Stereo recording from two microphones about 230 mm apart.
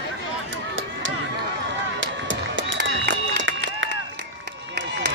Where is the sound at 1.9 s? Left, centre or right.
Right.